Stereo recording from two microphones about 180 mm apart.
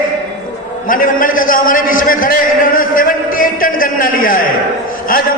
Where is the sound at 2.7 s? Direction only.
50° left (ahead or behind).